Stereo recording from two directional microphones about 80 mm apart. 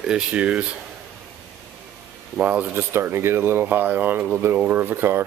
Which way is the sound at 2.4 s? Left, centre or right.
Centre.